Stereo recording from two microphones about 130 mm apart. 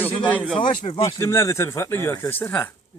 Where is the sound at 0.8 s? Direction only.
55° left (ahead or behind).